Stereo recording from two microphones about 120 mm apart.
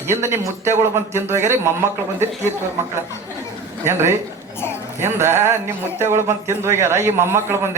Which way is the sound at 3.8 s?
20° right (ahead or behind).